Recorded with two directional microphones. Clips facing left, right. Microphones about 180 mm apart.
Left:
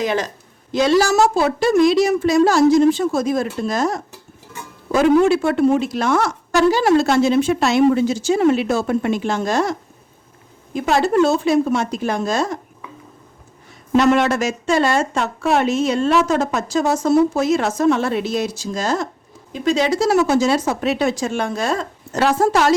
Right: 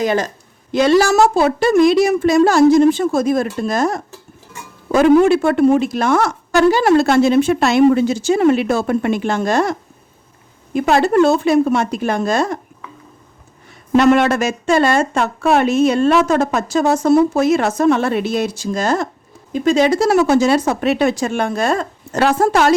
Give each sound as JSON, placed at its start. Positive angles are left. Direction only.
{"t": 0.0, "sound": "a woman's voice", "side_deg": -45}
{"t": 0.7, "sound": "a woman's voice", "side_deg": -55}
{"t": 10.8, "sound": "speech", "side_deg": -60}
{"t": 13.9, "sound": "speech", "side_deg": -60}